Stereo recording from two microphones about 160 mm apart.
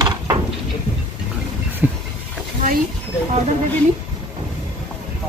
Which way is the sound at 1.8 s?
10° right (ahead or behind).